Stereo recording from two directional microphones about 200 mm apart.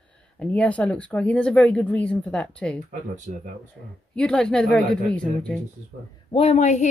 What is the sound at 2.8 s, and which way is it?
Speech, 40° right (ahead or behind).